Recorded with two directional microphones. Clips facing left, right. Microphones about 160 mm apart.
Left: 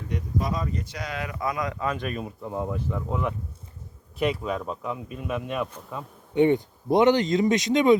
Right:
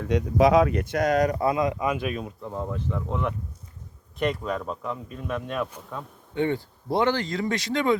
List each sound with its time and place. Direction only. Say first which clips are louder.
0.1 s a man's voice: right 10 dB; 90° right; by 5.6 s 5° left (ahead or behind)
6.3 s speech: left 6 dB; 20° left (ahead or behind)